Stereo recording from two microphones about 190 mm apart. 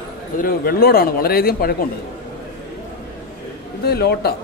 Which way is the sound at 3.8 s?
55° left (ahead or behind).